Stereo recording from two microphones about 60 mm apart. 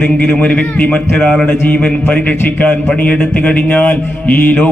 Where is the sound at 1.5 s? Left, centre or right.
Left.